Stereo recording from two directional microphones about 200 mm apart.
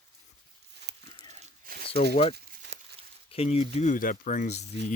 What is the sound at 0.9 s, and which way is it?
Pig, 55° right (ahead or behind).